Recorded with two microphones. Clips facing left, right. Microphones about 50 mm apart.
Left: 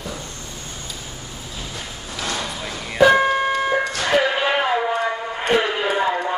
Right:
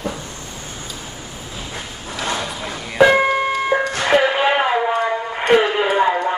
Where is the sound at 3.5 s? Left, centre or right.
Centre.